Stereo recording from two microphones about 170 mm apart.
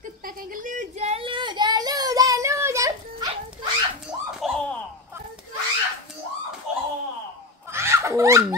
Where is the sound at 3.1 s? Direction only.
25° right (ahead or behind).